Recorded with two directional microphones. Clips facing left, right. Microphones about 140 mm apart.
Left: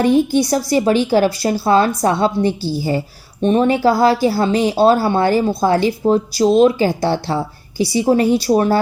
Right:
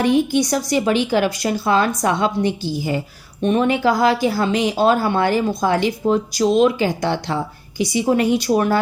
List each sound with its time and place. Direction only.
0.0 s speech: 35° left (ahead or behind)